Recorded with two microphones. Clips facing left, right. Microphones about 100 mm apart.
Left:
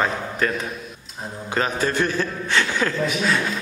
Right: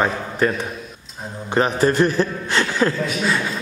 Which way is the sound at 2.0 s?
35° right (ahead or behind).